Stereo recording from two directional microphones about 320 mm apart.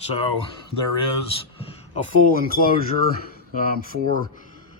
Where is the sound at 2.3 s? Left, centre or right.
Left.